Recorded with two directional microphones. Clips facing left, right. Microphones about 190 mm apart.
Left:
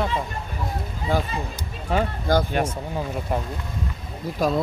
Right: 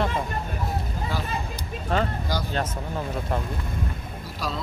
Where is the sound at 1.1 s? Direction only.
50° left (ahead or behind).